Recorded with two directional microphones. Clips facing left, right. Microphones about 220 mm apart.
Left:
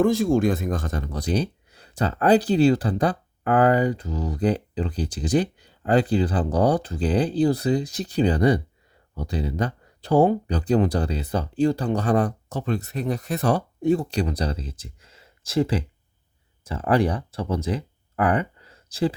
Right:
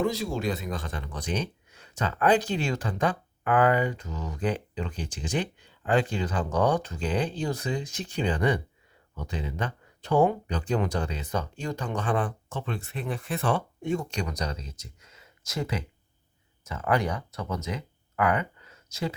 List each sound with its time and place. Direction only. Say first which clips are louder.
0.0 s speech: left 9 dB; 50° left (ahead or behind); by 19.1 s 30° left (ahead or behind)